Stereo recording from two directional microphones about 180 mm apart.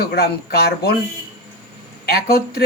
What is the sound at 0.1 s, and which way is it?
Speech, 60° left (ahead or behind).